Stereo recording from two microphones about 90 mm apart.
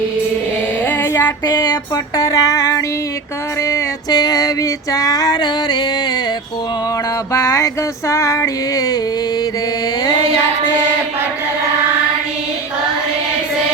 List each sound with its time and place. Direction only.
0.9 s female singing: 25° left (ahead or behind)
1.5 s female singing: 50° left (ahead or behind)
2.1 s female singing: 40° left (ahead or behind)
7.3 s female singing: 35° left (ahead or behind)